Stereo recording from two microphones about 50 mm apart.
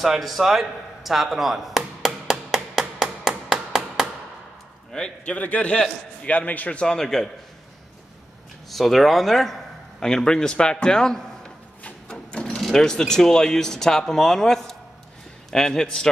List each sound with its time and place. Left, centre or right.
0.0 s chop: centre
4.9 s a man's voice: left
6.8 s speech: centre
8.6 s speech: centre
12.1 s a sound: centre
12.7 s speech: centre